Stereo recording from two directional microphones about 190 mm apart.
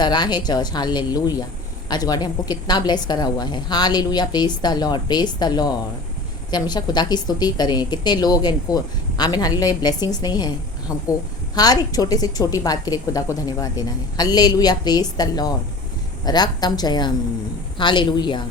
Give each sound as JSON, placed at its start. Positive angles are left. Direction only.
{"t": 0.0, "sound": "a woman's voice", "side_deg": 25}